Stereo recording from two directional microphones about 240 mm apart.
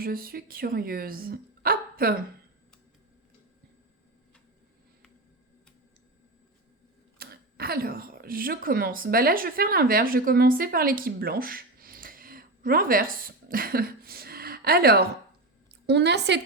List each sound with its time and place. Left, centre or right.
0.0 s speech: right
7.2 s a woman's voice: right